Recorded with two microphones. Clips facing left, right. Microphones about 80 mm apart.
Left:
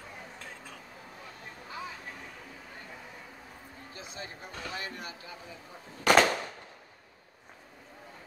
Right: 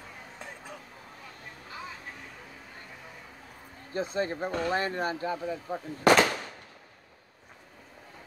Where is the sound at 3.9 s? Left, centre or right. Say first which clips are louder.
Right 15 dB; right.